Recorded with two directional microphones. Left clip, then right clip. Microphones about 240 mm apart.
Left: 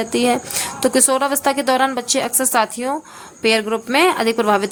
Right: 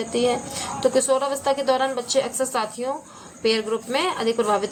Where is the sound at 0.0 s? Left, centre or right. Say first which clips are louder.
Left 4 dB; left.